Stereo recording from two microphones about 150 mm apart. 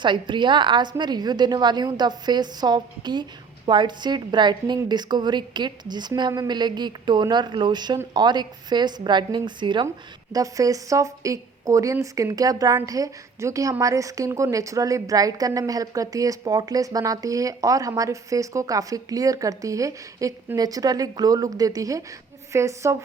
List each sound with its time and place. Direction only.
0.0 s speech: 30° right (ahead or behind)